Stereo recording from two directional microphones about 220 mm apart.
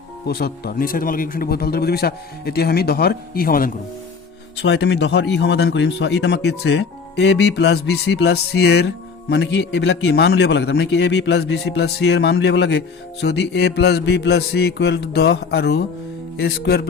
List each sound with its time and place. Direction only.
0.3 s a man's voice: 45° left (ahead or behind)
4.6 s a man's voice: 50° left (ahead or behind)